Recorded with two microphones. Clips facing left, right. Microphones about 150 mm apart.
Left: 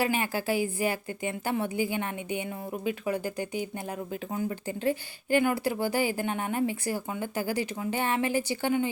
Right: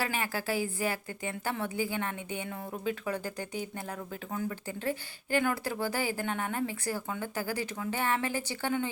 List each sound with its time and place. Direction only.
0.0 s a woman's voice: 15° left (ahead or behind)